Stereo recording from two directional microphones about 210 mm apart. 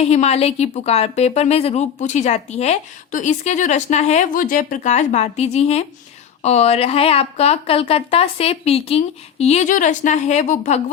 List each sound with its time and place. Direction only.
0.0 s a woman's voice: 30° left (ahead or behind)